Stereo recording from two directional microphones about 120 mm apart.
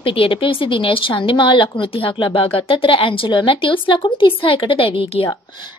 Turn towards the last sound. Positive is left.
turn(degrees=50)  # may be behind; listen again after turning